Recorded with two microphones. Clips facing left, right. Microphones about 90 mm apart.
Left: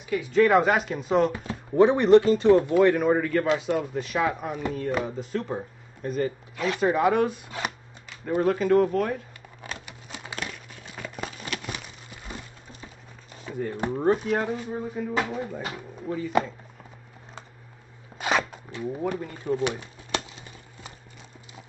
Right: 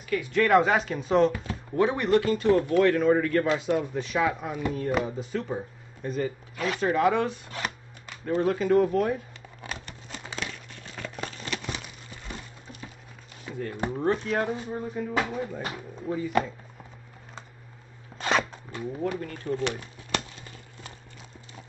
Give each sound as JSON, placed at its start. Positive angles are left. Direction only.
{"t": 0.4, "sound": "speech", "side_deg": 0}
{"t": 1.3, "sound": "speech", "side_deg": 20}
{"t": 3.3, "sound": "speech", "side_deg": 0}
{"t": 8.4, "sound": "speech", "side_deg": 0}
{"t": 9.8, "sound": "a sound", "side_deg": 10}
{"t": 13.5, "sound": "speech", "side_deg": 0}
{"t": 18.1, "sound": "a sound", "side_deg": 10}
{"t": 19.1, "sound": "pigeon", "side_deg": 15}